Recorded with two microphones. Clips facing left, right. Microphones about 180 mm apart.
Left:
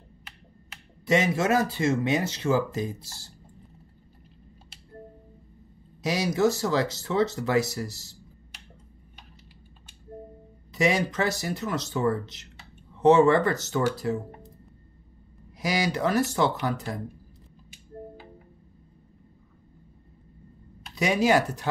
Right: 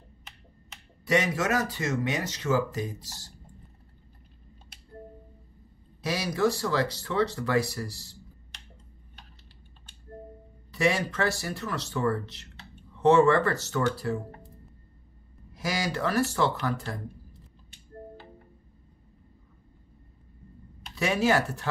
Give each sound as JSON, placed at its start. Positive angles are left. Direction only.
{"t": 1.0, "sound": "speech", "side_deg": 25}
{"t": 6.0, "sound": "speech", "side_deg": 20}
{"t": 10.7, "sound": "speech", "side_deg": 20}
{"t": 15.5, "sound": "speech", "side_deg": 15}
{"t": 20.9, "sound": "speech", "side_deg": 15}